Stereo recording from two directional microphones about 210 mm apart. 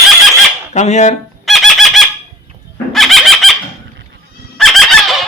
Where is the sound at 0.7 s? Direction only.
35° left (ahead or behind).